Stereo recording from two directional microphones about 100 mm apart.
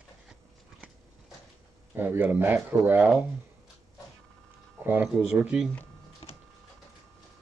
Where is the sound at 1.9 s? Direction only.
20° right (ahead or behind).